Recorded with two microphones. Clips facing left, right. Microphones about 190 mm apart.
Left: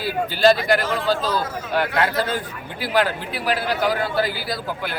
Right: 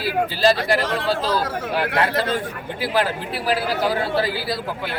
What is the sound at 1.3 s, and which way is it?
Speech, 60° right (ahead or behind).